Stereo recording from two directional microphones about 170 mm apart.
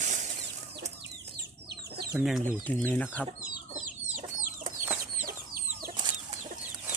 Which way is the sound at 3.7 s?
50° right (ahead or behind).